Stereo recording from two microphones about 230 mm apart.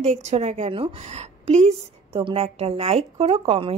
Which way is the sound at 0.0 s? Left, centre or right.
Right.